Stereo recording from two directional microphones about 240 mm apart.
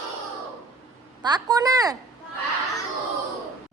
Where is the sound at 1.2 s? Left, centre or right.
Centre.